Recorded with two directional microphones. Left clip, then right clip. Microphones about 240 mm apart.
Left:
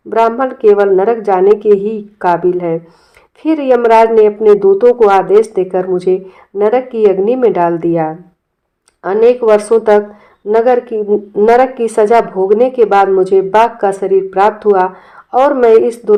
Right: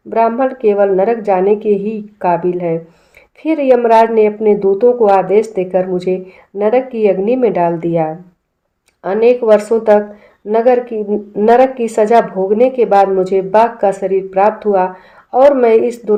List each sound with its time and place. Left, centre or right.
0.1 s a woman's voice: left